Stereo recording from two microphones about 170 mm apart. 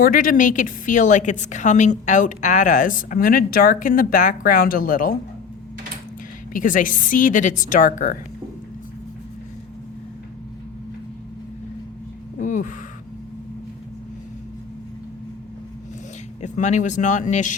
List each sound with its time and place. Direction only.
0.0 s a woman's voice: 55° left (ahead or behind)
6.5 s a woman's voice: 55° left (ahead or behind)
12.4 s a sound: 50° left (ahead or behind)
16.4 s a woman's voice: 45° left (ahead or behind)